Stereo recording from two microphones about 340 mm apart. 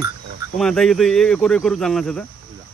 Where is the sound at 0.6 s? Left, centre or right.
Centre.